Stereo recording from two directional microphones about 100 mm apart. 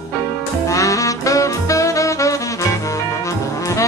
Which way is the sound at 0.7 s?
35° left (ahead or behind).